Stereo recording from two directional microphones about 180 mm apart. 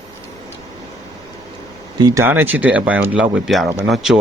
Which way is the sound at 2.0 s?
15° right (ahead or behind).